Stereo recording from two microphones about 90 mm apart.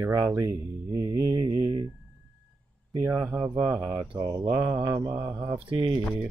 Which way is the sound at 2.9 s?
30° right (ahead or behind).